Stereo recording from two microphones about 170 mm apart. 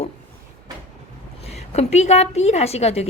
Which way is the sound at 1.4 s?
40° left (ahead or behind).